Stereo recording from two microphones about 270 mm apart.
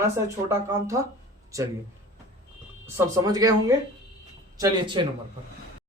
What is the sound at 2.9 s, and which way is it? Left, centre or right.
Speech, centre.